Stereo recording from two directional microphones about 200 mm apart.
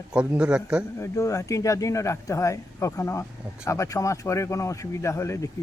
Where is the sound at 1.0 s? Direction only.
15° left (ahead or behind).